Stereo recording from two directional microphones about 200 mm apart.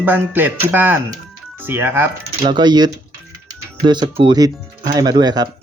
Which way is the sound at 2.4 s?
25° right (ahead or behind).